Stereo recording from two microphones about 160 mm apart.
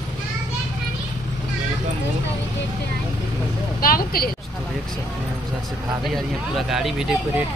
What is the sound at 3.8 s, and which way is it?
Speech, 65° left (ahead or behind).